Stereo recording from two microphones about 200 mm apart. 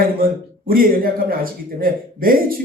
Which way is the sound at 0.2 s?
45° right (ahead or behind).